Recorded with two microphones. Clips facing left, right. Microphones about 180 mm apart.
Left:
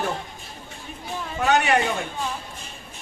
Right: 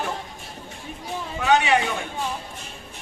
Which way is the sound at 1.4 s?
50° left (ahead or behind).